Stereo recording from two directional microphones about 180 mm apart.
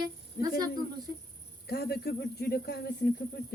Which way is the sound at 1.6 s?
60° left (ahead or behind).